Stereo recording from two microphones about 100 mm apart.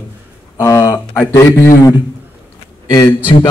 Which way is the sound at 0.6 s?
35° left (ahead or behind).